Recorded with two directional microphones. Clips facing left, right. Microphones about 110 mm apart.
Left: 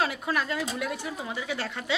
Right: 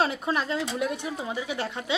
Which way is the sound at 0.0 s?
25° right (ahead or behind).